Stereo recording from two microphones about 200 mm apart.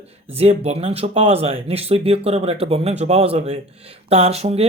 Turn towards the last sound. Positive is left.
turn(degrees=-30)  # may be behind; listen again after turning